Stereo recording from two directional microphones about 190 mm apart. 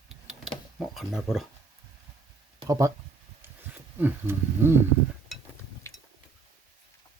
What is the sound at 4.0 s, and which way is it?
Speech, 10° right (ahead or behind).